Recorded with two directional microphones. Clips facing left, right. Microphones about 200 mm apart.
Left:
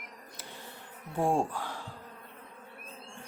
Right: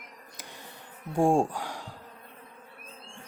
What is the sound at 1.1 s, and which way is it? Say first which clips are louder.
Speech: right 5 dB; 15° right (ahead or behind).